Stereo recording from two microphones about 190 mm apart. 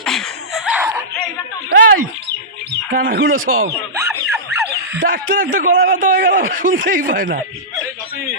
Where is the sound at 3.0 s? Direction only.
65° right (ahead or behind); by 3.7 s 90° right.